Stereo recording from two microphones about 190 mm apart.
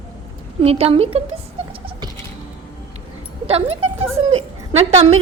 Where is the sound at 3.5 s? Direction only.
30° right (ahead or behind).